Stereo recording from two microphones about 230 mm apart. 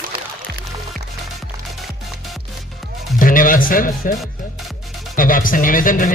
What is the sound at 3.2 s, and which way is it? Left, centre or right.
Speech, left.